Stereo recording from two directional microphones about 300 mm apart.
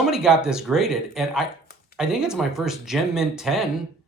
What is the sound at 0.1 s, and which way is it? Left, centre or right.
Speech, centre.